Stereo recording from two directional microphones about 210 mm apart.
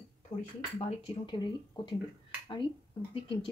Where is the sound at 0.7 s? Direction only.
25° left (ahead or behind).